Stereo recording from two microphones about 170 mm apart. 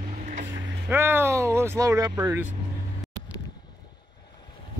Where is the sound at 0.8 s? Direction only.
15° right (ahead or behind).